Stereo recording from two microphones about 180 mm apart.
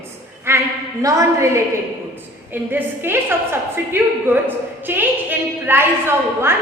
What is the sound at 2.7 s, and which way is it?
A woman's voice, 10° right (ahead or behind).